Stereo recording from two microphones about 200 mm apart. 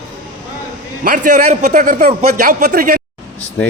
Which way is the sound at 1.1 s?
40° right (ahead or behind).